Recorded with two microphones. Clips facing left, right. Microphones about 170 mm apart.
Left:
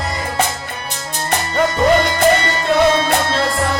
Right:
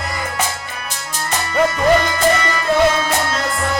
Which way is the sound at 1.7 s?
30° left (ahead or behind).